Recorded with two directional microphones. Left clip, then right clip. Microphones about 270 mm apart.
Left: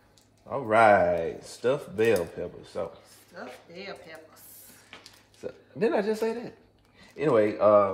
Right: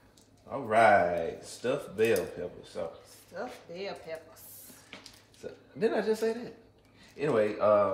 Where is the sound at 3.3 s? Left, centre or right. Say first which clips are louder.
Right 3 dB; centre.